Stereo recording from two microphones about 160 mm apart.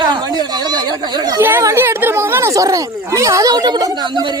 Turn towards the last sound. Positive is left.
turn(degrees=-25)  # may be behind; listen again after turning